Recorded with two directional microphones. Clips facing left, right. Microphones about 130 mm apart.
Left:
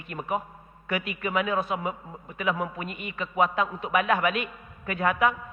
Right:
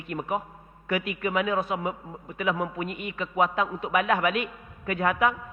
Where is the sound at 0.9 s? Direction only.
20° right (ahead or behind).